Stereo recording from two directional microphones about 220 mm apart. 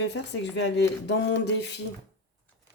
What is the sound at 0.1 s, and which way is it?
Speech, 50° left (ahead or behind).